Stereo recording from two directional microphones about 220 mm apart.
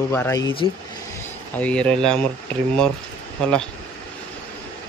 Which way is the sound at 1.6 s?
5° left (ahead or behind).